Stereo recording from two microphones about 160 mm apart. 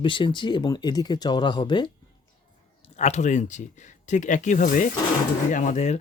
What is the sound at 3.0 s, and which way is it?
Speech, 45° left (ahead or behind).